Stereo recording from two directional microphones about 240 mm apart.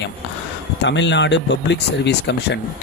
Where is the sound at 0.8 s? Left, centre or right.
Left.